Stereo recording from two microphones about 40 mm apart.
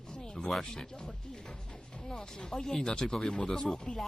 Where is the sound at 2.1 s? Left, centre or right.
Centre.